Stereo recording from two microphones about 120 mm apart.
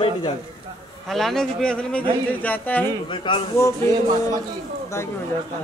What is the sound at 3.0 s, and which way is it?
Speech, 45° left (ahead or behind).